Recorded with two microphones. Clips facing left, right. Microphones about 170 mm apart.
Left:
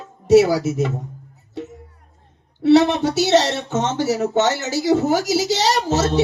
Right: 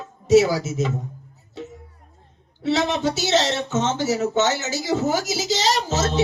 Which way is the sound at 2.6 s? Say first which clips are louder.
Left 7 dB; 60° left (ahead or behind).